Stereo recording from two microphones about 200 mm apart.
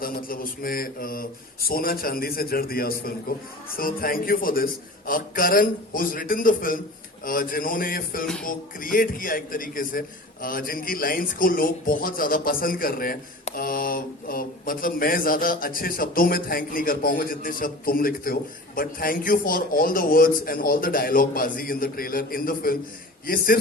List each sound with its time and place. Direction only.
0.0 s speech: 45° left (ahead or behind)